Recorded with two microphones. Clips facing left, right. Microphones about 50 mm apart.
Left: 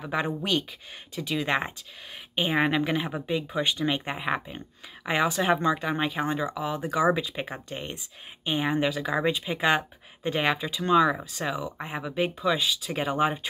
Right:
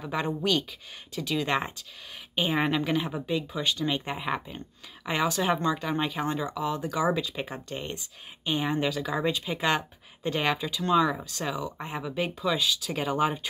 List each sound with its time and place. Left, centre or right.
0.0 s speech: centre